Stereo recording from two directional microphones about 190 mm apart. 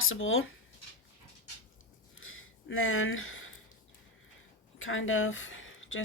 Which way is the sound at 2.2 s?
90° left.